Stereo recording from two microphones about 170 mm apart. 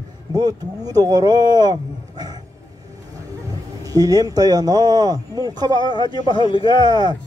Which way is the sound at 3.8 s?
20° right (ahead or behind).